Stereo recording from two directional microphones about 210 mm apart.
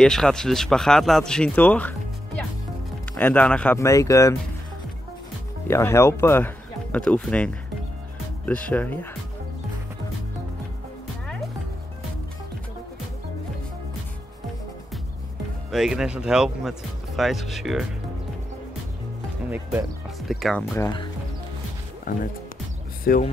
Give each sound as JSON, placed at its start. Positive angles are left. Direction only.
{"t": 0.0, "sound": "speech", "side_deg": 5}
{"t": 5.7, "sound": "speech", "side_deg": 10}
{"t": 15.7, "sound": "speech", "side_deg": 0}
{"t": 20.2, "sound": "speech", "side_deg": 0}
{"t": 20.7, "sound": "speech", "side_deg": 20}
{"t": 22.1, "sound": "speech", "side_deg": 40}